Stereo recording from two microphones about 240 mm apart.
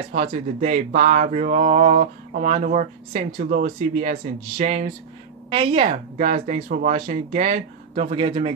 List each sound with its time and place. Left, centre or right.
0.1 s speech: right